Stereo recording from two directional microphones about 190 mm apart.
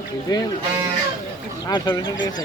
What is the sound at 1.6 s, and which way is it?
Speech, 20° left (ahead or behind).